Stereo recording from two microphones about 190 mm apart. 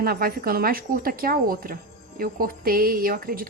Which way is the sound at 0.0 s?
50° right (ahead or behind).